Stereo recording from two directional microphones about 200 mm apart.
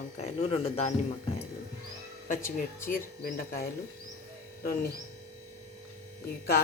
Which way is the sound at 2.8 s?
45° left (ahead or behind).